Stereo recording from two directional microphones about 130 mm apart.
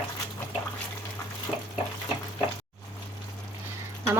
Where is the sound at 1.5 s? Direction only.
15° left (ahead or behind).